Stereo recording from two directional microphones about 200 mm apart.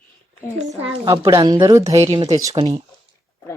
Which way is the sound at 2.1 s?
30° right (ahead or behind).